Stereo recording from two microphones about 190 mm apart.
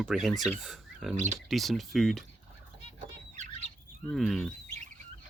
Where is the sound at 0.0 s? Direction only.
Centre (ahead or behind).